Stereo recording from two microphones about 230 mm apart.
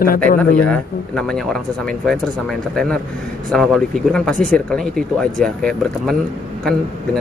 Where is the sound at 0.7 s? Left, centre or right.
Centre.